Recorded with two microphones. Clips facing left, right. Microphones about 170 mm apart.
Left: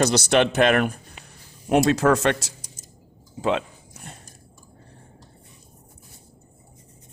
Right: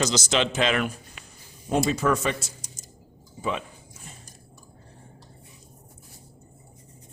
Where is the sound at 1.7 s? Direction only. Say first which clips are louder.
Left 5 dB; 80° left.